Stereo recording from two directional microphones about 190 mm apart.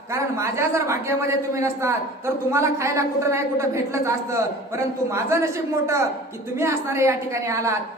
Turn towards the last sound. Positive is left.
turn(degrees=-15)  # may be behind; listen again after turning